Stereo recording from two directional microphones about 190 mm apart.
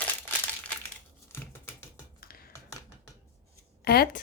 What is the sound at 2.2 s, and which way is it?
Typing, 50° left (ahead or behind).